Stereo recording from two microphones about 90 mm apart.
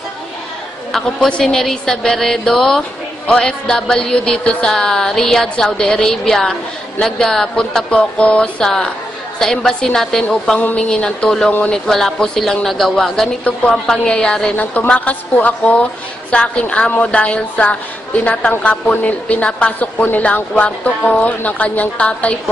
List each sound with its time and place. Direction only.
0.9 s a woman's voice: 5° left (ahead or behind)